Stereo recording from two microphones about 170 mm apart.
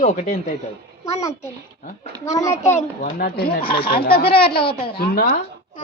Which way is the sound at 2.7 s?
55° left (ahead or behind).